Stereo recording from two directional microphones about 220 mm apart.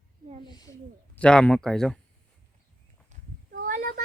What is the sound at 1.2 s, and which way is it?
Speech, 5° left (ahead or behind).